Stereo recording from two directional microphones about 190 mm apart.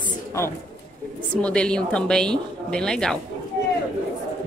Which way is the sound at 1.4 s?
5° left (ahead or behind).